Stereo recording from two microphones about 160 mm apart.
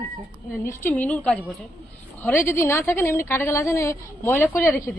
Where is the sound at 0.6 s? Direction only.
15° left (ahead or behind).